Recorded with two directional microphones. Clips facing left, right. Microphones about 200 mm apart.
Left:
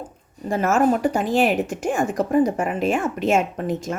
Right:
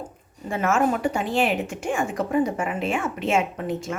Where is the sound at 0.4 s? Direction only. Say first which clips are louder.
Left 3 dB; 40° left (ahead or behind).